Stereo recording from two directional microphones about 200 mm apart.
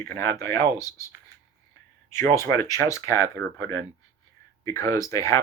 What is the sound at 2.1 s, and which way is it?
Speech, 15° left (ahead or behind).